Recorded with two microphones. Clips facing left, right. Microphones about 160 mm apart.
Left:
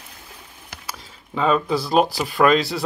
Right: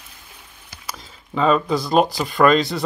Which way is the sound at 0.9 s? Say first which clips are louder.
Right 3 dB; 5° left (ahead or behind).